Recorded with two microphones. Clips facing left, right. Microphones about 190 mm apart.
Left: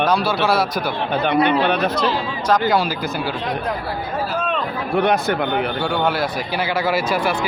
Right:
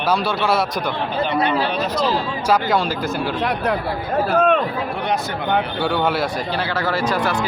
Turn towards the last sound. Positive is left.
turn(degrees=10)  # may be behind; listen again after turning